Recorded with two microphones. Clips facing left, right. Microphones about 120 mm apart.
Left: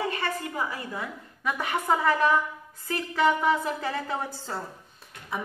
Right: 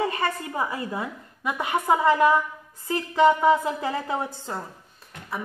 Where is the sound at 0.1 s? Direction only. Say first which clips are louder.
Right 3 dB; 35° right (ahead or behind).